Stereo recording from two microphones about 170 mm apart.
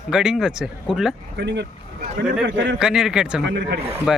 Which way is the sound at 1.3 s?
90° right.